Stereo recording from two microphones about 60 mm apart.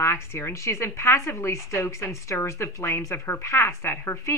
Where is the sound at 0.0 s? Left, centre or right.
Left.